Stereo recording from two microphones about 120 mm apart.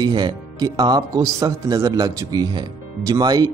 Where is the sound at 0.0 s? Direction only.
35° right (ahead or behind).